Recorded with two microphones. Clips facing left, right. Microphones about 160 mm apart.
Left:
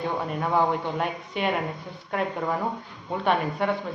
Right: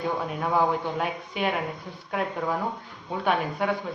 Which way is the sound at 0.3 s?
Centre (ahead or behind).